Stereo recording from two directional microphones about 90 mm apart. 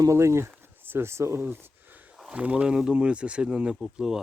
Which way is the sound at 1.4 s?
25° right (ahead or behind).